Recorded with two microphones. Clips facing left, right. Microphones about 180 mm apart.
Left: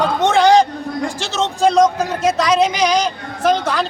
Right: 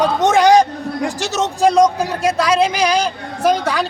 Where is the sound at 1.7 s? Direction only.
15° right (ahead or behind).